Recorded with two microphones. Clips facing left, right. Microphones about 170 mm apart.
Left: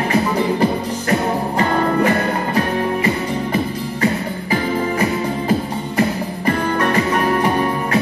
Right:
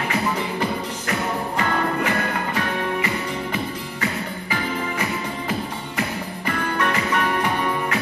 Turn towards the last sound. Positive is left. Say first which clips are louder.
# left 6 dB
turn(degrees=35)  # may be behind; listen again after turning